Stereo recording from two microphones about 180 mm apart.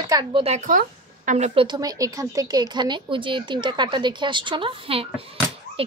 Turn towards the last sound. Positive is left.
turn(degrees=-30)  # may be behind; listen again after turning